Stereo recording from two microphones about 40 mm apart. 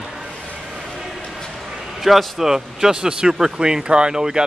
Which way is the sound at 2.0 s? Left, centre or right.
Centre.